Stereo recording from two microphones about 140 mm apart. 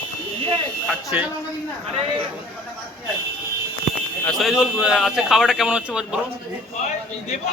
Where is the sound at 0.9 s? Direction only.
Centre (ahead or behind).